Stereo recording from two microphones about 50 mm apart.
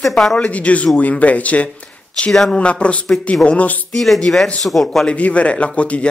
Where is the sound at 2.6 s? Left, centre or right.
Left.